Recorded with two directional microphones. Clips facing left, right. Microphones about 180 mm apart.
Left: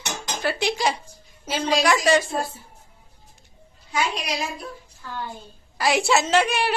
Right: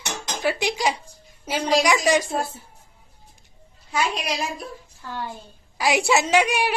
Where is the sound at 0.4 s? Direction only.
15° right (ahead or behind).